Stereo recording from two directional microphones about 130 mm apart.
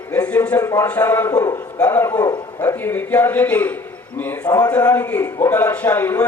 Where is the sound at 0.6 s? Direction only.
25° left (ahead or behind).